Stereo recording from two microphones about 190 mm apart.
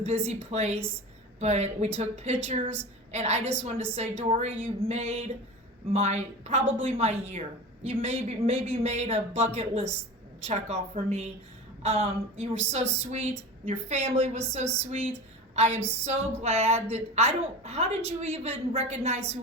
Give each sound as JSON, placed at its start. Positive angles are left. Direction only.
{"t": 0.0, "sound": "a woman's voice", "side_deg": -35}
{"t": 15.5, "sound": "a sound", "side_deg": -35}
{"t": 16.4, "sound": "a woman's voice", "side_deg": -35}